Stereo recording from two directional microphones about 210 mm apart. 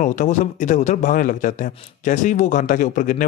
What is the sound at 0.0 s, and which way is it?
A man's voice, 35° left (ahead or behind).